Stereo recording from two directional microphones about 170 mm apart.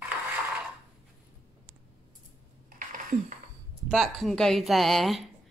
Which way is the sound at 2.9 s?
50° right (ahead or behind).